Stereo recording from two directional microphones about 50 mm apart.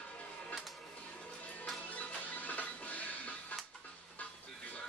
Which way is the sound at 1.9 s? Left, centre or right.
Left.